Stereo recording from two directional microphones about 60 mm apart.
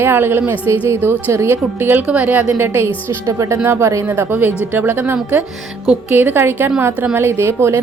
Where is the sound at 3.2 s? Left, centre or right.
Right.